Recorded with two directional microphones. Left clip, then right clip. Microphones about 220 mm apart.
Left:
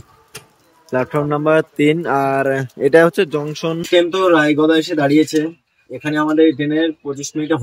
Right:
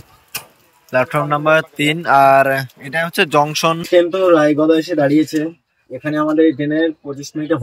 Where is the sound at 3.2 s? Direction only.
5° left (ahead or behind).